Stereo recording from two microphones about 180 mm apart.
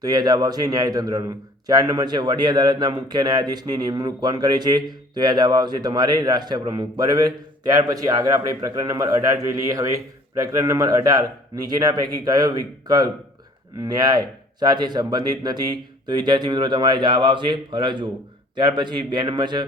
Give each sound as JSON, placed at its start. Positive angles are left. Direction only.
{"t": 0.0, "sound": "a man's voice", "side_deg": -20}